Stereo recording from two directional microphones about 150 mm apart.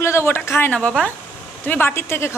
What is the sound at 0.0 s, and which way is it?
A woman's voice, 15° left (ahead or behind).